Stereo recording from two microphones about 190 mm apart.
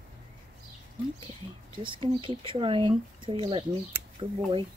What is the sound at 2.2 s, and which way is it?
Speech, 25° right (ahead or behind).